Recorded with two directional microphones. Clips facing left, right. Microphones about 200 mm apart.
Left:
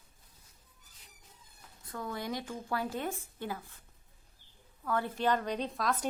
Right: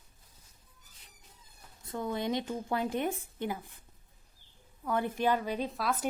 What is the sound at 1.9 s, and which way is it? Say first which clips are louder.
Speech: right 5 dB; 20° right (ahead or behind).